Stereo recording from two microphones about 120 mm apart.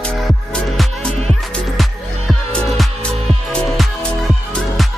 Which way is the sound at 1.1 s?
60° right (ahead or behind).